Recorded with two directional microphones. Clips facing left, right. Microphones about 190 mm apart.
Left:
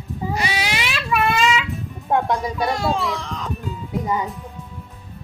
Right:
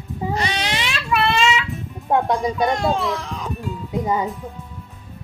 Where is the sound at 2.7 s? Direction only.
Centre (ahead or behind).